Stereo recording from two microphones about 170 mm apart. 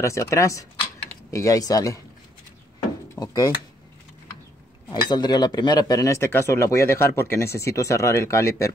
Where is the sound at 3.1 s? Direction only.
20° left (ahead or behind).